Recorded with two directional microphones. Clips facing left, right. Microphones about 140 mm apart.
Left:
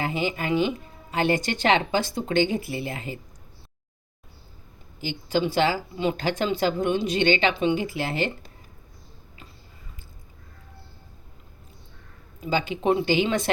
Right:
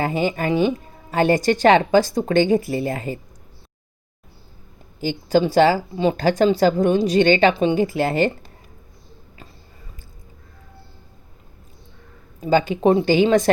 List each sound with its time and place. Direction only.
0.0 s speech: 45° right (ahead or behind)
4.9 s speech: 40° right (ahead or behind)
7.5 s speech: 30° right (ahead or behind)
7.8 s speech: 45° right (ahead or behind)
12.4 s speech: 45° right (ahead or behind)